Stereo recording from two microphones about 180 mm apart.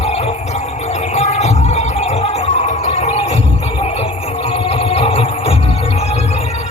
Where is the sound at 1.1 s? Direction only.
40° left (ahead or behind).